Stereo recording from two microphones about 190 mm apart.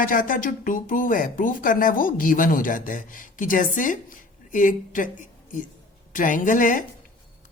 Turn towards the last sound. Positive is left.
turn(degrees=45)  # may be behind; listen again after turning